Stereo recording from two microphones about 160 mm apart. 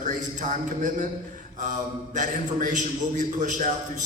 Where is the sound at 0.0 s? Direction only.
50° right (ahead or behind).